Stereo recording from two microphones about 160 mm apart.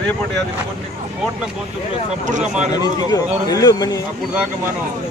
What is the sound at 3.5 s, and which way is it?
Speech, 25° left (ahead or behind).